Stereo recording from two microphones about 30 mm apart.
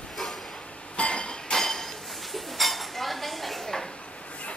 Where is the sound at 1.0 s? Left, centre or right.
Left.